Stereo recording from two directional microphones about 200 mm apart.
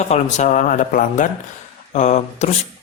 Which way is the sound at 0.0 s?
35° left (ahead or behind).